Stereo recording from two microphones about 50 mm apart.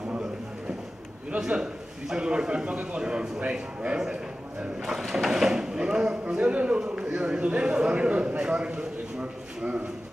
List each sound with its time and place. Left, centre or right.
1.5 s a man's voice: centre